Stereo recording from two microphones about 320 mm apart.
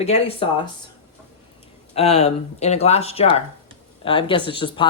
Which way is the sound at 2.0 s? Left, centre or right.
Centre.